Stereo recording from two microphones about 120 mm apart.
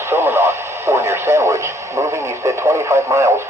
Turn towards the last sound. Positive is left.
turn(degrees=-25)  # may be behind; listen again after turning